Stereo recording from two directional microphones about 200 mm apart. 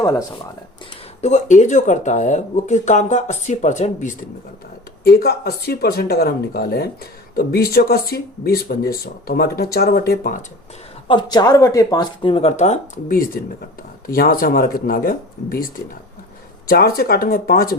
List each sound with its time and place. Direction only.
0.0 s speech: 15° left (ahead or behind)
1.2 s speech: 35° left (ahead or behind)
5.0 s speech: 50° left (ahead or behind)
11.1 s speech: 20° left (ahead or behind); by 17.7 s 45° left (ahead or behind)